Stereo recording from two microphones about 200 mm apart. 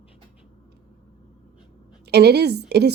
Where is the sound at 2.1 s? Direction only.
55° right (ahead or behind).